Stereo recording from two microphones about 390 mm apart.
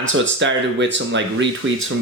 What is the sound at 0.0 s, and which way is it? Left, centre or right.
Speech, right.